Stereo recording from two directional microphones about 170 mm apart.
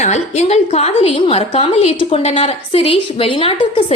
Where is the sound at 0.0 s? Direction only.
40° left (ahead or behind).